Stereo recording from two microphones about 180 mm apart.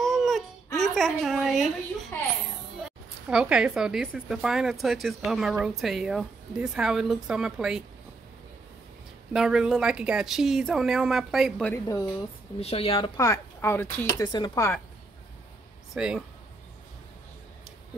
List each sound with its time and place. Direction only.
0.0 s a sound: centre (ahead or behind)
0.7 s a woman's voice: centre (ahead or behind)
9.3 s speech: centre (ahead or behind)
12.5 s a woman's voice: 35° left (ahead or behind)
13.2 s speech: 15° left (ahead or behind)
15.9 s speech: 5° right (ahead or behind)